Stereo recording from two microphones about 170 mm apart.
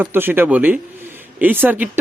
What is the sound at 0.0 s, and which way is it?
Speech, 10° right (ahead or behind).